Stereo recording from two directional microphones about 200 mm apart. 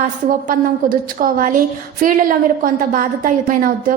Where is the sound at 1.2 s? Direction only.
45° right (ahead or behind).